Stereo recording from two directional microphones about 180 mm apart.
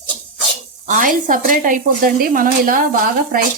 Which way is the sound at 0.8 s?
45° right (ahead or behind).